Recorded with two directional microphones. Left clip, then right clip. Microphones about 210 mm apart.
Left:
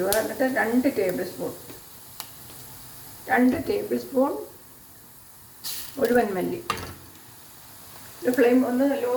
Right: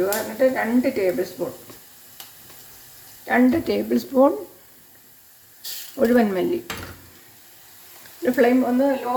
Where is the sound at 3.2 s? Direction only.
55° right (ahead or behind).